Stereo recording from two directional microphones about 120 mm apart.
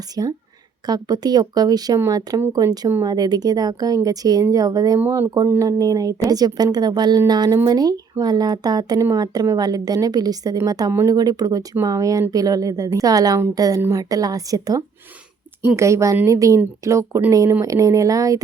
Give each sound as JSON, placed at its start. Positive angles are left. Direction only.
{"t": 0.2, "sound": "speech", "side_deg": -35}
{"t": 4.9, "sound": "speech", "side_deg": -20}